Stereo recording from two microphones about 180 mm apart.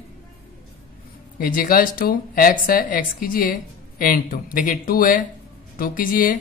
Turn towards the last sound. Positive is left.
turn(degrees=50)  # may be behind; listen again after turning